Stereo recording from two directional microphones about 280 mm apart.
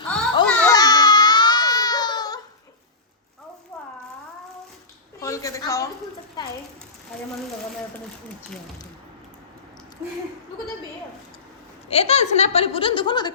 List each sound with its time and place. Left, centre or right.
0.4 s baby cry: centre
5.2 s a sound: centre
11.9 s speech: left